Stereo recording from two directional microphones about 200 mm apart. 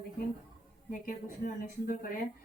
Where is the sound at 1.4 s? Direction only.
45° left (ahead or behind).